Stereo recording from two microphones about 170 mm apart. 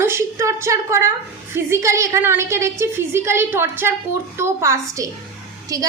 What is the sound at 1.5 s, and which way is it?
A woman's voice, 15° right (ahead or behind).